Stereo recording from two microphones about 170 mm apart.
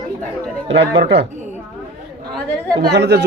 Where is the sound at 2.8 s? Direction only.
85° right.